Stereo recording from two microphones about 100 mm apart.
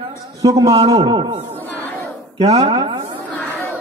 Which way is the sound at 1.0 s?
55° right (ahead or behind).